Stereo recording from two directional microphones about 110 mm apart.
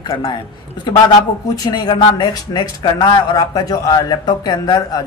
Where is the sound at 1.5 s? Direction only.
40° left (ahead or behind).